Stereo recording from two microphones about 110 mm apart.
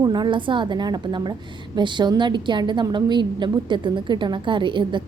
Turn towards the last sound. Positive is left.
turn(degrees=-45)  # may be behind; listen again after turning